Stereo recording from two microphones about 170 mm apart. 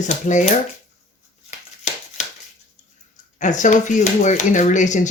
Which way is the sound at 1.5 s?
45° left (ahead or behind).